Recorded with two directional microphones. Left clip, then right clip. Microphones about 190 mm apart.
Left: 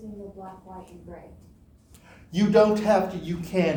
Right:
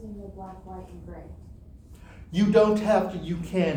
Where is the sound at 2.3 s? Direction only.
15° left (ahead or behind).